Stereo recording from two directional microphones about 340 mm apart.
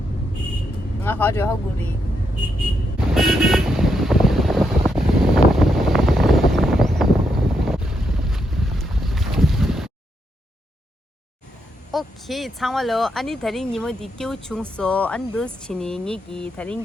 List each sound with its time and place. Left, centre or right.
1.0 s speech: centre
3.2 s vehicle: centre
11.9 s speech: centre